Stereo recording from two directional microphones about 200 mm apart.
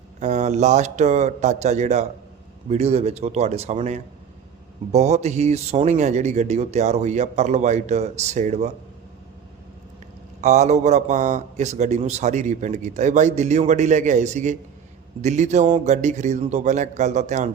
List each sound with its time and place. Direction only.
0.2 s speech: 35° right (ahead or behind)
10.4 s speech: 35° right (ahead or behind)